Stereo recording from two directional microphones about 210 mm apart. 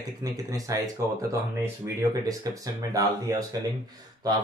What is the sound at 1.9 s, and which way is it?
Speech, 15° right (ahead or behind).